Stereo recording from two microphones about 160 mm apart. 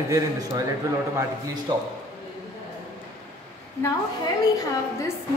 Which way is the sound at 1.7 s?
30° right (ahead or behind).